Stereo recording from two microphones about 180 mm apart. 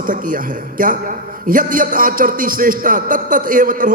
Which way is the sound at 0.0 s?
50° right (ahead or behind).